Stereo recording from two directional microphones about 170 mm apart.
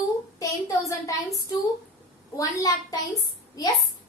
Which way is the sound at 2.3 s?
20° left (ahead or behind).